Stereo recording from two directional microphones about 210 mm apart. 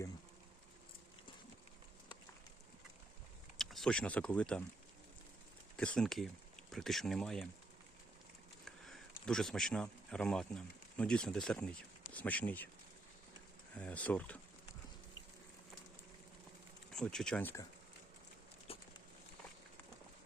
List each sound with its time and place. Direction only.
3.6 s speech: centre (ahead or behind)
5.7 s speech: 5° left (ahead or behind)
8.6 s speech: centre (ahead or behind)
13.7 s speech: 5° left (ahead or behind)
16.9 s speech: 5° left (ahead or behind)
18.7 s a sound: 25° left (ahead or behind)